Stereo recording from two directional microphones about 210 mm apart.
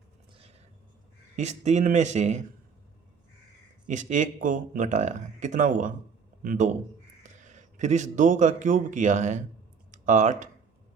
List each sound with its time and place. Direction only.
1.4 s speech: 30° right (ahead or behind)
3.8 s a man's voice: 35° right (ahead or behind)